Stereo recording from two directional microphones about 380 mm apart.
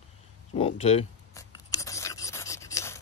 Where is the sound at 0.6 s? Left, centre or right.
Centre.